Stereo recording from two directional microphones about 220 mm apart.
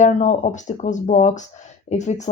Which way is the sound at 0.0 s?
35° left (ahead or behind).